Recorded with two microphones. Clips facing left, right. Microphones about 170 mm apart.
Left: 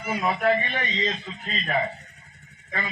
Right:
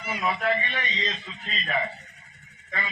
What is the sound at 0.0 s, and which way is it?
Speech, 50° left (ahead or behind).